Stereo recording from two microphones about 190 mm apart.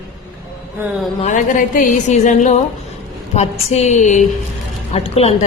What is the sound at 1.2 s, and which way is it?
A woman's voice, 40° left (ahead or behind).